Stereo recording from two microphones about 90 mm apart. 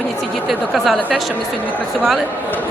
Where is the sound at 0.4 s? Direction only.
Centre (ahead or behind).